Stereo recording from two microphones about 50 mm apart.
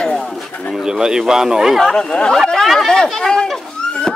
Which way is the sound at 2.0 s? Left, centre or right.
Centre.